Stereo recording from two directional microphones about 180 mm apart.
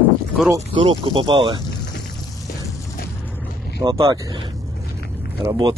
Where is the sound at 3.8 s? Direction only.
25° right (ahead or behind).